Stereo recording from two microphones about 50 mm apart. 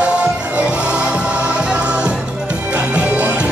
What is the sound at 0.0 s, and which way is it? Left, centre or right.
Music, right.